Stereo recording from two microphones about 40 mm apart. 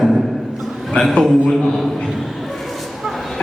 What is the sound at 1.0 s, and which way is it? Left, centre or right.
Speech, left.